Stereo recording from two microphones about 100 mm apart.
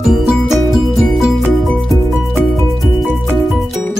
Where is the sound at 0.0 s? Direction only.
Centre (ahead or behind).